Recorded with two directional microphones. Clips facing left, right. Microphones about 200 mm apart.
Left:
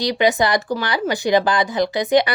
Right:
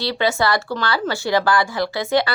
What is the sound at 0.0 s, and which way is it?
A woman's voice, 15° left (ahead or behind).